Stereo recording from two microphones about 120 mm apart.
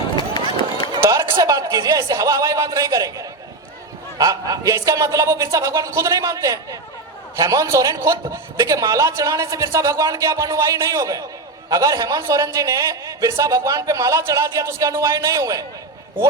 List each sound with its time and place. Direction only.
0.2 s run: 40° left (ahead or behind)
1.0 s a man's voice: 20° right (ahead or behind)